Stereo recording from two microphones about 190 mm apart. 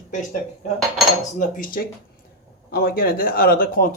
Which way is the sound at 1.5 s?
45° left (ahead or behind).